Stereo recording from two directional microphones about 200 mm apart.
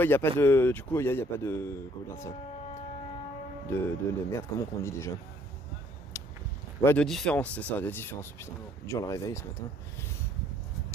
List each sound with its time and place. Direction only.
0.0 s speech: 10° left (ahead or behind)
3.7 s speech: 10° left (ahead or behind)
6.8 s speech: 5° left (ahead or behind)